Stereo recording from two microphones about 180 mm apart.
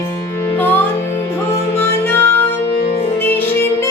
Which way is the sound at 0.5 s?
10° left (ahead or behind).